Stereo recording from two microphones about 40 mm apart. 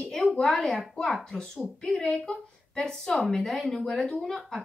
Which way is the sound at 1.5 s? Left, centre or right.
Centre.